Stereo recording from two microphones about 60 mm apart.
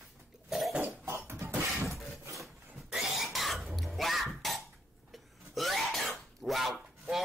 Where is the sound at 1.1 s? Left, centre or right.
Right.